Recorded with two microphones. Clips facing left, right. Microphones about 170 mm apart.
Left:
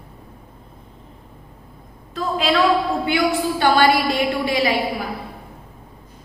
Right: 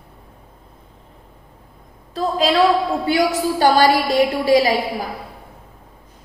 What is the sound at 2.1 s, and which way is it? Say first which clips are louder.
A woman's voice: right 2 dB; 35° right (ahead or behind).